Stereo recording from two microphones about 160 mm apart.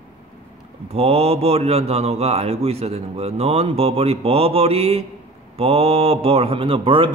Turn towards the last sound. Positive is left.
turn(degrees=-35)  # may be behind; listen again after turning